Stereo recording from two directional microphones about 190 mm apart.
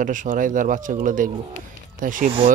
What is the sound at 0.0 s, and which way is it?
Speech, 45° right (ahead or behind).